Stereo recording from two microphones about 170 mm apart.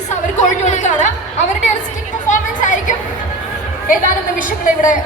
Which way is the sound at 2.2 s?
50° left (ahead or behind).